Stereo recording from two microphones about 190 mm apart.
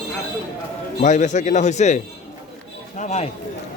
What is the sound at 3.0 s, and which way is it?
Speech, 35° left (ahead or behind).